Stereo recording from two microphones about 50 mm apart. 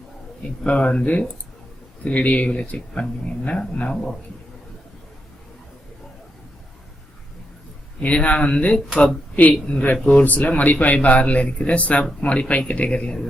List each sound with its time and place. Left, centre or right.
0.6 s speech: left
8.0 s speech: left
10.2 s speech: left